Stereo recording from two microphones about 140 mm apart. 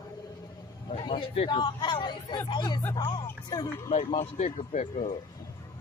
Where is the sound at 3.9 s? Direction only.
45° left (ahead or behind).